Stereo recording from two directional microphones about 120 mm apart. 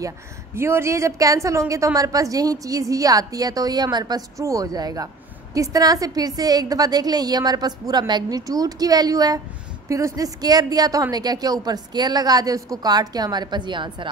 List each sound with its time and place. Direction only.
0.6 s a woman's voice: 20° right (ahead or behind); by 14.1 s 40° right (ahead or behind)